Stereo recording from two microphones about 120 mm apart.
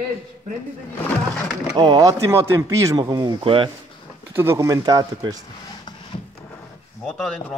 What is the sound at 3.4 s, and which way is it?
Speech, 50° right (ahead or behind).